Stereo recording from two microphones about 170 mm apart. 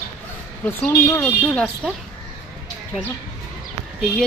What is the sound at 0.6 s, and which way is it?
Speech, 10° left (ahead or behind).